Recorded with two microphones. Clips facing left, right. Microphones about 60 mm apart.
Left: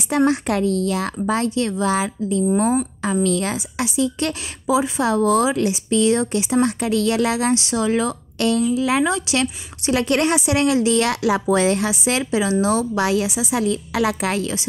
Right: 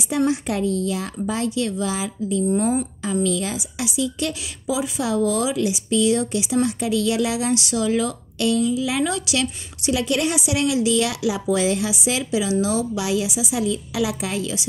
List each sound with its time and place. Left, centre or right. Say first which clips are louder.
0.1 s a woman's voice: left 3 dB; left
3.3 s a woman's voice: left 3 dB; left
7.5 s a woman's voice: left 1 dB; left
9.0 s a woman's voice: left 3 dB; left